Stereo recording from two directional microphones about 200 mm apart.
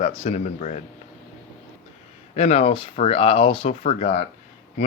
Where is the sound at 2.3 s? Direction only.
30° left (ahead or behind).